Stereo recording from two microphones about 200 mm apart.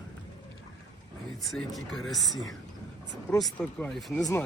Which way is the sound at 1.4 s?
Centre (ahead or behind).